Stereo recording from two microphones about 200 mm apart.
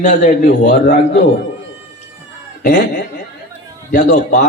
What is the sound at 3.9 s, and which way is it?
Speech, 40° left (ahead or behind).